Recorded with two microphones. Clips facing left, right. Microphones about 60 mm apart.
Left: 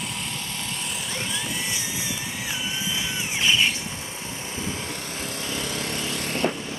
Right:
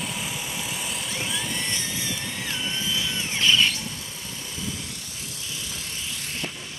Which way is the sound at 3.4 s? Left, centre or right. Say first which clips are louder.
Right 1 dB; centre.